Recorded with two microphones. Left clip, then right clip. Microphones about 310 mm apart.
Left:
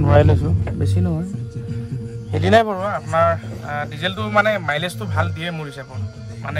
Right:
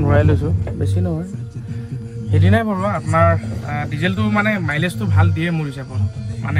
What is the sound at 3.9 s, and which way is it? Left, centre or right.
A man's voice, centre.